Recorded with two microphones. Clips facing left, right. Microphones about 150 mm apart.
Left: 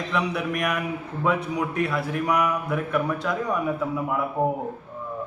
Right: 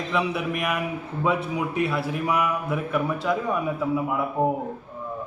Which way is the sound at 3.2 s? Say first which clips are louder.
Right 3 dB; 20° right (ahead or behind).